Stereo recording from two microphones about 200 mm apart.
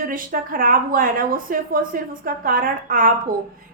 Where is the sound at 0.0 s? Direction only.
45° right (ahead or behind).